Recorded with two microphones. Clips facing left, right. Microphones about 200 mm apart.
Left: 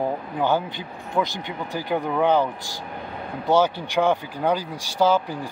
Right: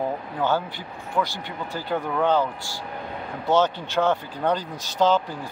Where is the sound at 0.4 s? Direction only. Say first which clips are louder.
Left 2 dB; 15° left (ahead or behind).